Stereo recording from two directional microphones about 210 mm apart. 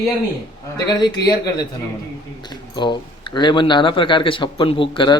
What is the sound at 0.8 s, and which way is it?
Speech, 20° left (ahead or behind).